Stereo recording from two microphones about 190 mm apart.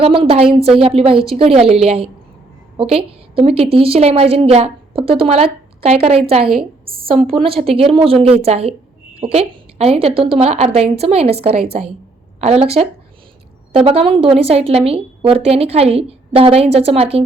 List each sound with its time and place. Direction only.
0.0 s a woman's voice: 30° right (ahead or behind)